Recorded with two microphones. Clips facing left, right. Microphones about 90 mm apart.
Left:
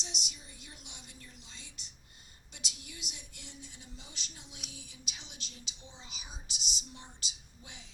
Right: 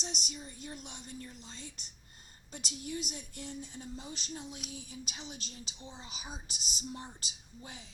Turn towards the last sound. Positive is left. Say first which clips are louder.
# right 5 dB
turn(degrees=-40)  # may be behind; listen again after turning